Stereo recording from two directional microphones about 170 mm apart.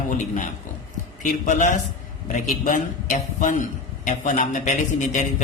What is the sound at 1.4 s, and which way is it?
Speech, 45° left (ahead or behind).